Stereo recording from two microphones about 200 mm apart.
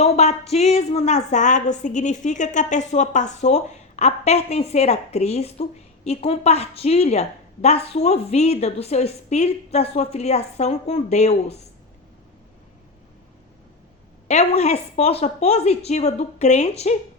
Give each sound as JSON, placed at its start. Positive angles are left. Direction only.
{"t": 0.0, "sound": "a woman's voice", "side_deg": 30}
{"t": 14.3, "sound": "a woman's voice", "side_deg": 35}